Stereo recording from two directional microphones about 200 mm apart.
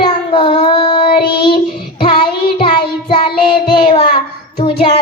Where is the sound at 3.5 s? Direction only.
25° left (ahead or behind).